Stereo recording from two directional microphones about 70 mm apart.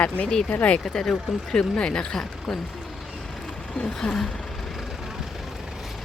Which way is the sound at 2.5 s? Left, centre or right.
Centre.